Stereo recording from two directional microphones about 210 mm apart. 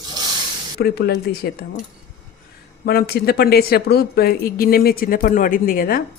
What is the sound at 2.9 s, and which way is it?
Speech, 50° left (ahead or behind).